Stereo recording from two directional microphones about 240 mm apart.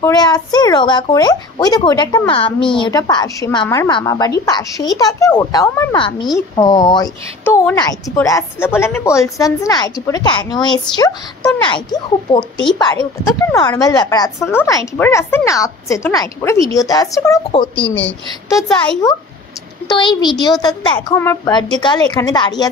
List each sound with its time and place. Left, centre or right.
0.0 s a woman's voice: centre
19.9 s a woman's voice: centre